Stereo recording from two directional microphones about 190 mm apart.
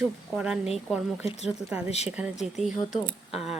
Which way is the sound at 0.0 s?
5° right (ahead or behind).